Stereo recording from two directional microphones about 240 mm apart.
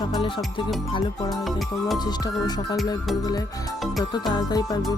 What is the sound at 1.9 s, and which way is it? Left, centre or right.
Music, centre.